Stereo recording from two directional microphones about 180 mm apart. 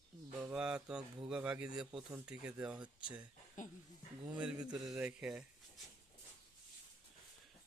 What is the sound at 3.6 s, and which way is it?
Speech, 45° left (ahead or behind).